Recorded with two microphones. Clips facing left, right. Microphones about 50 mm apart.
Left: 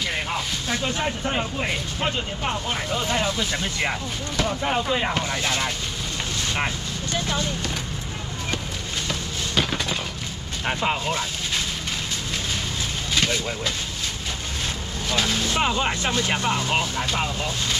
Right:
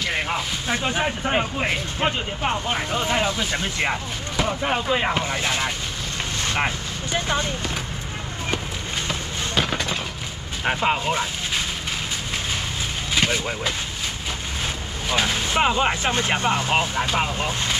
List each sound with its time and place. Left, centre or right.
0.1 s speech: centre
9.6 s a sound: centre
10.6 s speech: centre
13.1 s speech: centre
15.0 s speech: centre